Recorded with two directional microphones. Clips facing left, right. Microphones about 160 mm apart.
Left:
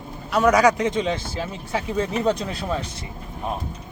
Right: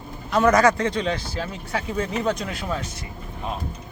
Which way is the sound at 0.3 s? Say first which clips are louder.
Even; 10° left (ahead or behind).